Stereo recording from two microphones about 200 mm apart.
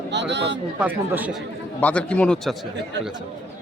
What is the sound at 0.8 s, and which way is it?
Speech, 10° right (ahead or behind).